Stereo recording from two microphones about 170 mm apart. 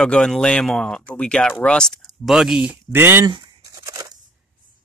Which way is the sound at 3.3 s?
25° right (ahead or behind).